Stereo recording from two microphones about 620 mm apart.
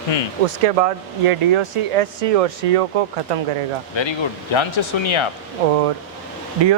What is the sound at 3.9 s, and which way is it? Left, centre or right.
Speech, left.